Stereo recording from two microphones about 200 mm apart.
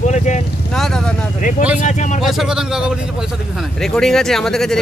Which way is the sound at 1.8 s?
40° left (ahead or behind).